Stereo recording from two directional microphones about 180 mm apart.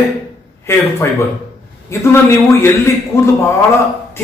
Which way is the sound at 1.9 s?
15° left (ahead or behind).